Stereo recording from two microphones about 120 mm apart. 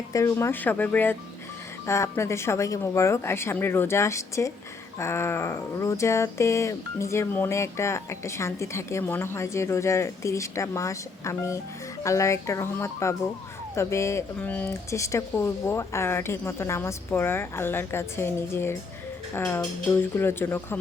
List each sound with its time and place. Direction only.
0.1 s speech: 25° left (ahead or behind)
14.3 s speech: 15° left (ahead or behind)
14.8 s speech: 25° left (ahead or behind)